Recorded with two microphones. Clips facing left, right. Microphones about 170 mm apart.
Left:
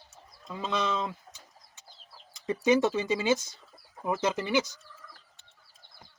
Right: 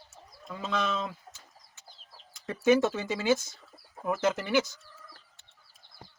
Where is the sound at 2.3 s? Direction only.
15° left (ahead or behind).